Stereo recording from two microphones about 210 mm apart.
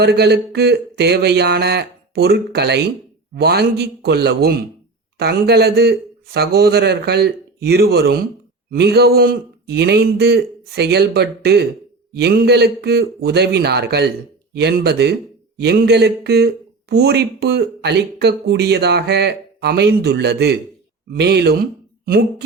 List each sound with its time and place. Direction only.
0.0 s speech: 50° right (ahead or behind)